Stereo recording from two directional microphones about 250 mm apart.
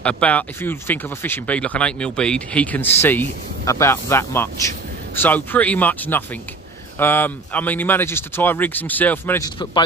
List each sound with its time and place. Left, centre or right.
0.0 s speech: centre